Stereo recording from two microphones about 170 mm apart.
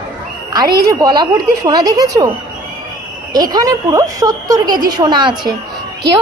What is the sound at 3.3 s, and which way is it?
A woman's voice, 20° right (ahead or behind).